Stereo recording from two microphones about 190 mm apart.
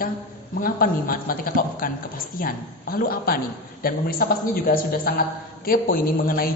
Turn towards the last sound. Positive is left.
turn(degrees=50)  # may be behind; listen again after turning